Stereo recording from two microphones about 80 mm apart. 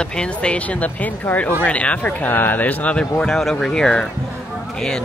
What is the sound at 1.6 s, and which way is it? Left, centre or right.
Speech, centre.